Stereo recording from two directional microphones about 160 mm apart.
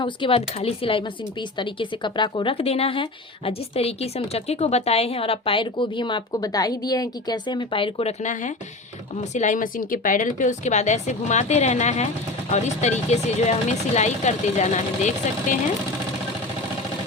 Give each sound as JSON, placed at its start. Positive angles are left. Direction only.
{"t": 0.0, "sound": "speech", "side_deg": 35}
{"t": 8.2, "sound": "speech", "side_deg": 50}